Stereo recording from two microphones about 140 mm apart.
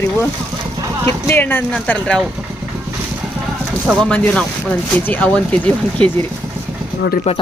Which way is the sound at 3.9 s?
5° left (ahead or behind).